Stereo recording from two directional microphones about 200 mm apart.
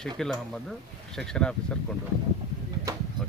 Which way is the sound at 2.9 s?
15° right (ahead or behind).